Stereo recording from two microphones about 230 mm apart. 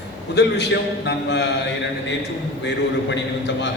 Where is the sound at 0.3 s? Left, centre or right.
Left.